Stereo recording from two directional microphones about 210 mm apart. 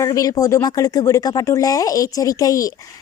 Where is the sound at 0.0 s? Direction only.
15° left (ahead or behind).